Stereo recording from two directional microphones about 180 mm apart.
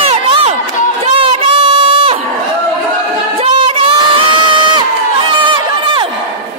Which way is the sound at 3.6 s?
30° right (ahead or behind).